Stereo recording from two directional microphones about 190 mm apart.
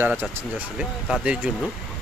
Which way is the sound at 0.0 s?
10° right (ahead or behind).